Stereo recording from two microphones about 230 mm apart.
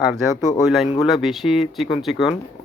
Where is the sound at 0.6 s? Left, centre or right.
Centre.